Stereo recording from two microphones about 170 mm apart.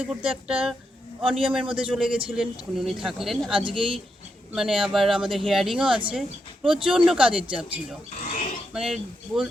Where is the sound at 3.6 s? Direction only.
30° right (ahead or behind).